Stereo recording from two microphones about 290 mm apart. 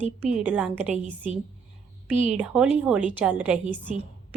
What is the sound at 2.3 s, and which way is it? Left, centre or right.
A woman's voice, centre.